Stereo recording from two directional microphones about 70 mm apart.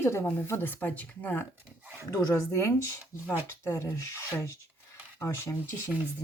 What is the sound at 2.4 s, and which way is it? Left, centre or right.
Speech, left.